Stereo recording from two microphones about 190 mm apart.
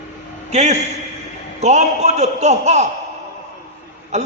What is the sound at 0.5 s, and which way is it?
A man's voice, 35° right (ahead or behind).